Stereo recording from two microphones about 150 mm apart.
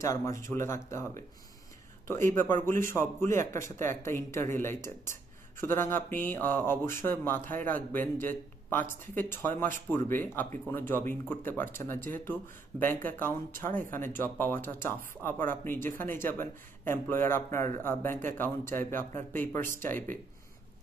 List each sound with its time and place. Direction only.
0.0 s speech: 20° left (ahead or behind)
2.0 s speech: 15° left (ahead or behind)
2.5 s a man's voice: 60° right (ahead or behind)
2.9 s speech: 15° left (ahead or behind)
3.7 s a man's voice: 55° right (ahead or behind)
4.0 s speech: 15° left (ahead or behind)